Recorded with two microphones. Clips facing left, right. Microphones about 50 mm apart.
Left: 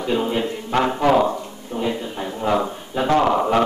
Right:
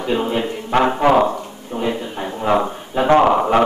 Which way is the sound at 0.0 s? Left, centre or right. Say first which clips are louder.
Right 2 dB; centre.